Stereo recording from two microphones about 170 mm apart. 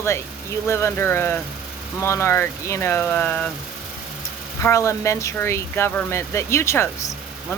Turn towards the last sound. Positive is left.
turn(degrees=15)  # may be behind; listen again after turning